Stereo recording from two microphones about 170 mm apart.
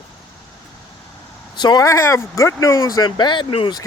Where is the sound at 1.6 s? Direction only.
25° left (ahead or behind).